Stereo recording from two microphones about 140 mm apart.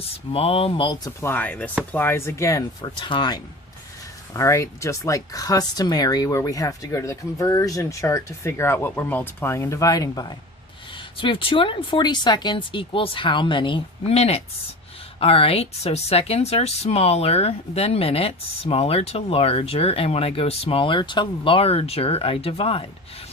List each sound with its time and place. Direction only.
0.3 s speech: 45° left (ahead or behind)
1.2 s speech: 15° left (ahead or behind)
3.0 s speech: 35° left (ahead or behind)
4.4 s speech: 20° left (ahead or behind)
10.9 s speech: 35° left (ahead or behind)